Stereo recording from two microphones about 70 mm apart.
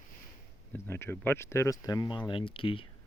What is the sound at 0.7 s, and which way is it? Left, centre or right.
Speech, left.